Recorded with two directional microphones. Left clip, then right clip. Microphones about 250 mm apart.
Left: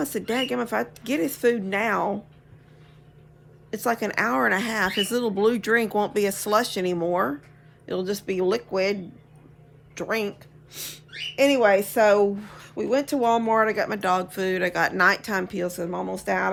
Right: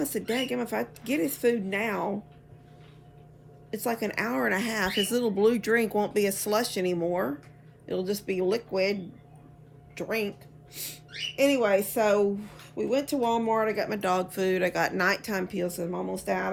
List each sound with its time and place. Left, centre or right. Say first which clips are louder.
0.0 s a woman's voice: left 3 dB; centre
3.7 s a woman's voice: left 5 dB; centre